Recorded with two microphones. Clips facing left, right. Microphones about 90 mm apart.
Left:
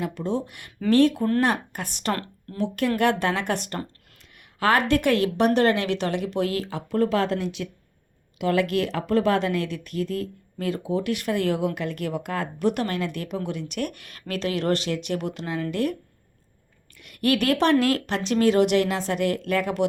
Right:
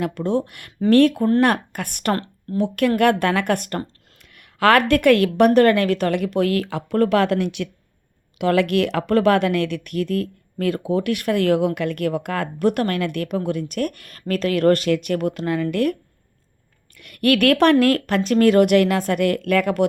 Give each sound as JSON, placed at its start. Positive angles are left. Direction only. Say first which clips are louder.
{"t": 0.0, "sound": "speech", "louder": "right 5 dB", "side_deg": -60}
{"t": 2.1, "sound": "speech", "louder": "right 6 dB", "side_deg": -30}
{"t": 2.6, "sound": "speech", "louder": "right 5 dB", "side_deg": -55}
{"t": 4.4, "sound": "a woman's voice", "louder": "right 6 dB", "side_deg": -70}
{"t": 17.0, "sound": "speech", "louder": "right 5 dB", "side_deg": -60}